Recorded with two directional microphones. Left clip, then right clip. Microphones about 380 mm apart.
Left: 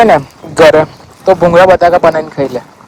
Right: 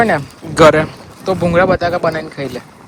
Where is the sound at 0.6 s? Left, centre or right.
Centre.